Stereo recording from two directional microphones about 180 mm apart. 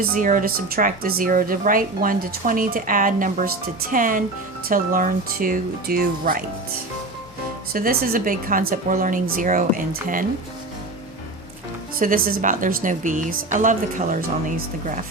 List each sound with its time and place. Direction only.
0.0 s speech: 50° right (ahead or behind)
7.7 s speech: 55° right (ahead or behind)
11.9 s speech: 50° right (ahead or behind)